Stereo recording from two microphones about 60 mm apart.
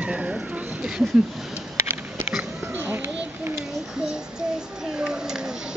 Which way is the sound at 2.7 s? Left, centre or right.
Right.